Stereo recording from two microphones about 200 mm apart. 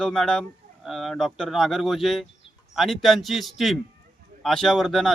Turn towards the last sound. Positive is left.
turn(degrees=0)  # may be behind; listen again after turning